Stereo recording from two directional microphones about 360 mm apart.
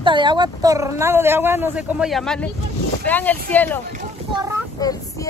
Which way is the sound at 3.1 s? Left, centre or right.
Centre.